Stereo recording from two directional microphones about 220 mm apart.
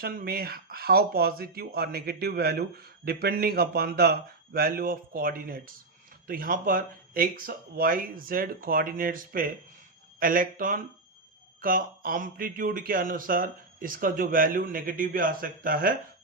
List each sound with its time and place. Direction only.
0.0 s speech: 40° right (ahead or behind)